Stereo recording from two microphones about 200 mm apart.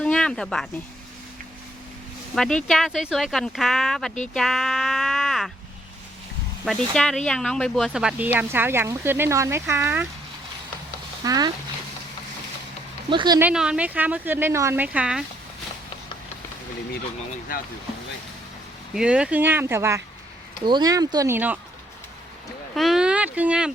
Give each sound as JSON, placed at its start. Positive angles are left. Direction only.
{"t": 0.0, "sound": "speech", "side_deg": 5}
{"t": 2.3, "sound": "speech", "side_deg": 5}
{"t": 4.4, "sound": "a sound", "side_deg": 0}
{"t": 6.9, "sound": "speech", "side_deg": 0}
{"t": 11.2, "sound": "speech", "side_deg": -20}
{"t": 13.1, "sound": "speech", "side_deg": -20}
{"t": 13.4, "sound": "speech", "side_deg": -5}
{"t": 18.9, "sound": "speech", "side_deg": -5}
{"t": 22.7, "sound": "speech", "side_deg": 0}